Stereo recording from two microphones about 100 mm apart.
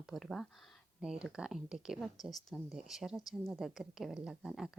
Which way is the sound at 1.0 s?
10° right (ahead or behind).